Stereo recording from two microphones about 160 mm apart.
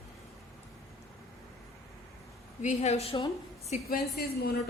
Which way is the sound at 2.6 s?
45° left (ahead or behind).